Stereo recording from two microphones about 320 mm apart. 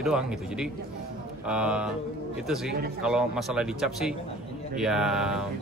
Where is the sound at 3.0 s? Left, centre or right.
Centre.